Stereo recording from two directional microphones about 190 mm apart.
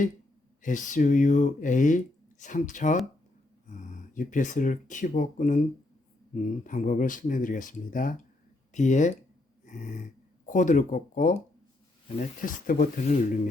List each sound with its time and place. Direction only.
0.6 s speech: 40° left (ahead or behind)